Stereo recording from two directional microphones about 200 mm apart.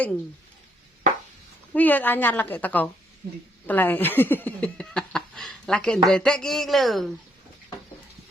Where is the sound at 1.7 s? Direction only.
10° left (ahead or behind).